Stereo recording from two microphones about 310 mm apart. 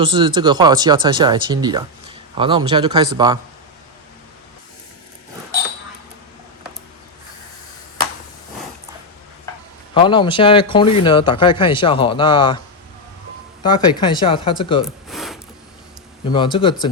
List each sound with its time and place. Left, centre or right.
0.0 s speech: centre
9.9 s a man's voice: centre
13.7 s a man's voice: centre
15.1 s mechanisms: centre
16.3 s a man's voice: centre